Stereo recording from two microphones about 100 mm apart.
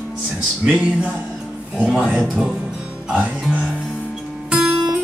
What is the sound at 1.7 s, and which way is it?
Music, 10° right (ahead or behind).